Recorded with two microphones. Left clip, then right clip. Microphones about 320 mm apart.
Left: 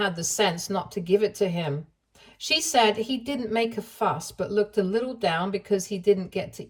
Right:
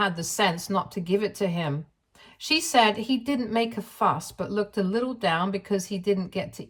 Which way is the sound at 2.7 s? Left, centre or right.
Centre.